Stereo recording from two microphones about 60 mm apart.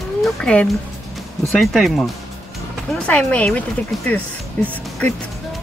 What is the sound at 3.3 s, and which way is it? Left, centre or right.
Speech, left.